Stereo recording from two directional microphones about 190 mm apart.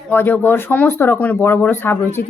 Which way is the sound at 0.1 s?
10° left (ahead or behind).